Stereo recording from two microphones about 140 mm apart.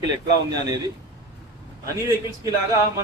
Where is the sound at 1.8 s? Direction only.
20° right (ahead or behind).